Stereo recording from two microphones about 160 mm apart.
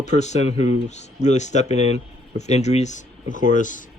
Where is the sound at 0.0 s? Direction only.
45° left (ahead or behind).